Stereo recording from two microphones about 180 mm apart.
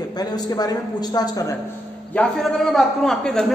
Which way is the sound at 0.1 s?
20° left (ahead or behind).